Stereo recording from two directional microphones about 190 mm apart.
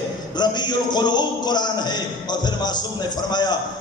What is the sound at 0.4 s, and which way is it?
A man's voice, 20° left (ahead or behind).